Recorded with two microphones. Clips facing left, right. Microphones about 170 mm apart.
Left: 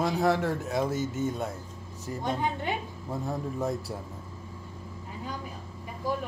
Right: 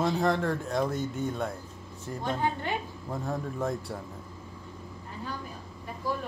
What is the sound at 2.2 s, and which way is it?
Speech, 15° left (ahead or behind).